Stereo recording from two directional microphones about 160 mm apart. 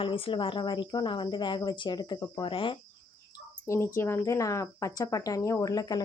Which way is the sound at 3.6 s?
15° left (ahead or behind).